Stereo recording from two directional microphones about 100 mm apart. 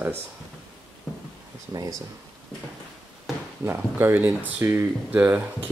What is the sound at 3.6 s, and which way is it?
Speech, 25° right (ahead or behind).